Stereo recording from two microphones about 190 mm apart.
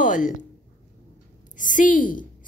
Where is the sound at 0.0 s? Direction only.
40° left (ahead or behind).